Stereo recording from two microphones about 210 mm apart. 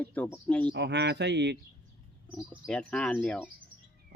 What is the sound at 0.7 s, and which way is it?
Speech, 55° right (ahead or behind).